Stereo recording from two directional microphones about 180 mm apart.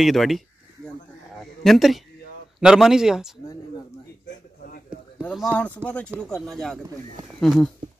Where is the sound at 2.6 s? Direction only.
5° right (ahead or behind).